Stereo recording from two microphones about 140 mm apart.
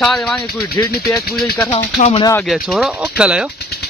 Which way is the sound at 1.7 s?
50° left (ahead or behind).